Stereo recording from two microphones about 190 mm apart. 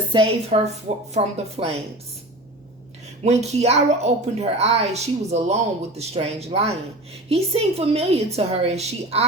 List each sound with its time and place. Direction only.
0.1 s a woman's voice: 30° right (ahead or behind)
3.2 s a woman's voice: 35° right (ahead or behind)